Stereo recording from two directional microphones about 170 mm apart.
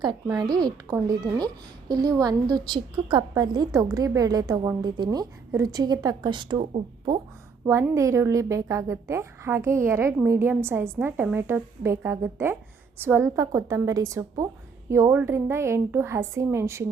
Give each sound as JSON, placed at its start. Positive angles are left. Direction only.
{"t": 0.0, "sound": "a woman's voice", "side_deg": -25}
{"t": 7.6, "sound": "a woman's voice", "side_deg": -15}